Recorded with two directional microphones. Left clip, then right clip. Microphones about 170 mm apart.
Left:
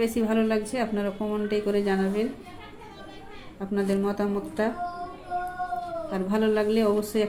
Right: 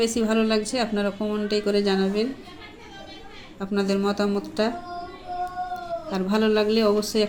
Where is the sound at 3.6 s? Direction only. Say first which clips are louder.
Right 2 dB; 35° right (ahead or behind).